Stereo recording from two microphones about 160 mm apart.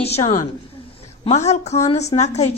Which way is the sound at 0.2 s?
20° left (ahead or behind).